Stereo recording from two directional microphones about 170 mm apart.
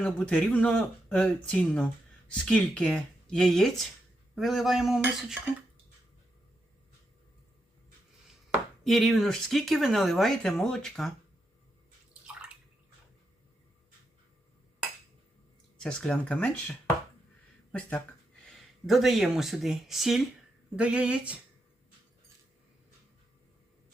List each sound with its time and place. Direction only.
0.0 s speech: 5° left (ahead or behind)
8.8 s speech: centre (ahead or behind)
15.8 s speech: 5° left (ahead or behind)